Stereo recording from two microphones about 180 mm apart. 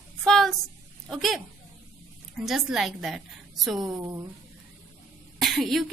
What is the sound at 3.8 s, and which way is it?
Speech, 20° right (ahead or behind).